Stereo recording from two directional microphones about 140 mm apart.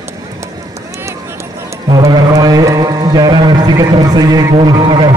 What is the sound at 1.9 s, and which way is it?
Carnatic music, 25° right (ahead or behind).